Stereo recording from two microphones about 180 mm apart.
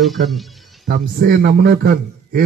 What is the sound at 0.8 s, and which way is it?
Speech, 55° right (ahead or behind).